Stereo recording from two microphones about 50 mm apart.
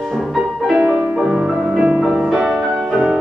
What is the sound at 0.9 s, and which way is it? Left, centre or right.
Music, right.